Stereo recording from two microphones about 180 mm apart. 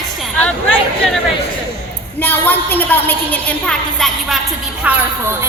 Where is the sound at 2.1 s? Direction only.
10° left (ahead or behind).